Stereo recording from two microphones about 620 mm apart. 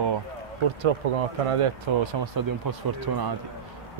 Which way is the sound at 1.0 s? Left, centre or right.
Right.